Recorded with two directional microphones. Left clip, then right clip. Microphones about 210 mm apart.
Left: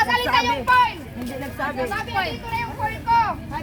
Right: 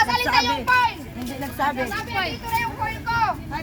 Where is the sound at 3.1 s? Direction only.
20° right (ahead or behind).